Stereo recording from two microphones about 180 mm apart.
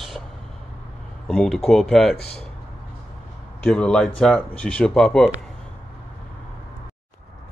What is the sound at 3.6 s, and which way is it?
Speech, 5° left (ahead or behind).